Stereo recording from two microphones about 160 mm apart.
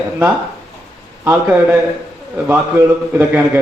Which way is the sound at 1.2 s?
15° right (ahead or behind).